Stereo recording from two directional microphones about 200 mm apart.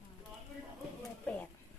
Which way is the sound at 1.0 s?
5° left (ahead or behind).